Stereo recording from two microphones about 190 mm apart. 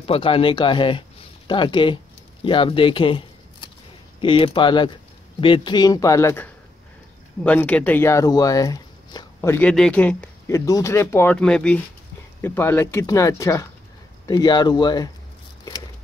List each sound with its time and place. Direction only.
0.0 s speech: 30° left (ahead or behind)